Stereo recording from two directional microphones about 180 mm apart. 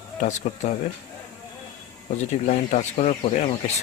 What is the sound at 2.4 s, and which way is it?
Speech, 40° left (ahead or behind).